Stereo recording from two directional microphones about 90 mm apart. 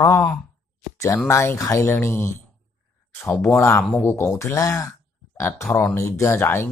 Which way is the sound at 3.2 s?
15° left (ahead or behind).